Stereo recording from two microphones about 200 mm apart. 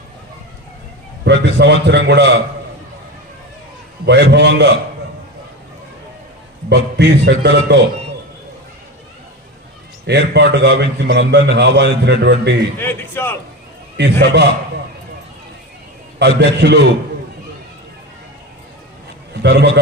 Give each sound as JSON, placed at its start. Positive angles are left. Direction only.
{"t": 1.2, "sound": "a man's voice", "side_deg": -60}
{"t": 4.0, "sound": "a man's voice", "side_deg": -55}
{"t": 6.7, "sound": "a man's voice", "side_deg": -60}
{"t": 10.1, "sound": "a man's voice", "side_deg": -60}
{"t": 12.8, "sound": "a man's voice", "side_deg": 10}
{"t": 13.9, "sound": "a man's voice", "side_deg": -55}
{"t": 16.4, "sound": "a man's voice", "side_deg": -60}
{"t": 19.3, "sound": "a man's voice", "side_deg": -55}